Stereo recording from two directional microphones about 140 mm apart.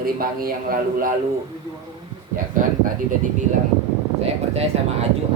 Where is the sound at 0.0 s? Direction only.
90° right.